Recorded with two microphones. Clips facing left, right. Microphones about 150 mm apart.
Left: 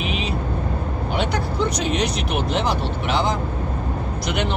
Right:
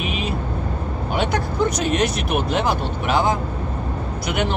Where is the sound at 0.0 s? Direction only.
55° right (ahead or behind).